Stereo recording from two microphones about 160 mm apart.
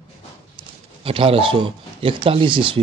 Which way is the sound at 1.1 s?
35° right (ahead or behind).